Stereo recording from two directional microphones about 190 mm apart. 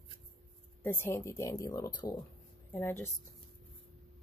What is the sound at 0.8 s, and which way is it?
Speech, 15° left (ahead or behind).